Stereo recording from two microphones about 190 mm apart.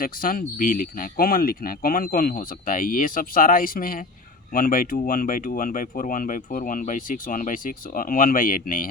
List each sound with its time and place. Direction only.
0.0 s speech: 50° left (ahead or behind)